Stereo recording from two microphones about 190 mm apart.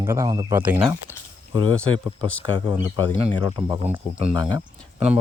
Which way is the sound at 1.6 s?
90° left.